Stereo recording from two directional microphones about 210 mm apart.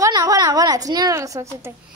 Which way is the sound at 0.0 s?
15° right (ahead or behind).